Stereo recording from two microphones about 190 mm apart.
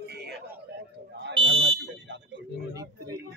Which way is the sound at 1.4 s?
85° right.